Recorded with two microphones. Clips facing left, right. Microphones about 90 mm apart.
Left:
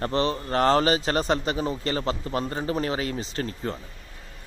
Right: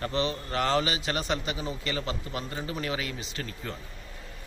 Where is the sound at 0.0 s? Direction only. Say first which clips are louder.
Left 5 dB; 40° left (ahead or behind).